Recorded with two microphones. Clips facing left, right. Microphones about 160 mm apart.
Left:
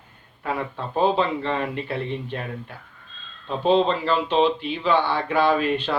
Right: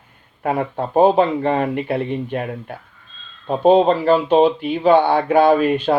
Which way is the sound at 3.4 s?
50° right (ahead or behind).